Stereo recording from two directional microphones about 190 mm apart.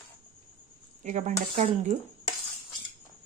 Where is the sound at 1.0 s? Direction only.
40° right (ahead or behind).